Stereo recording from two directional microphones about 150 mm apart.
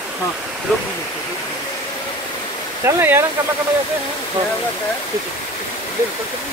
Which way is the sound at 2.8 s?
15° right (ahead or behind).